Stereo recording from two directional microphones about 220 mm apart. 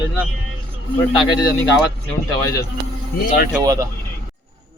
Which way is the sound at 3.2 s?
40° left (ahead or behind).